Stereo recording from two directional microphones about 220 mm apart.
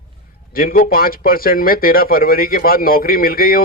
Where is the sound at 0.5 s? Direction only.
40° left (ahead or behind).